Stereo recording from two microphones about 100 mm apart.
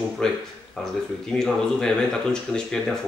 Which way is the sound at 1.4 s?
5° left (ahead or behind).